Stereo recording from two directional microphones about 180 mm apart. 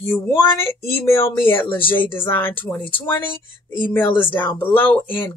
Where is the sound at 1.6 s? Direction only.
30° left (ahead or behind).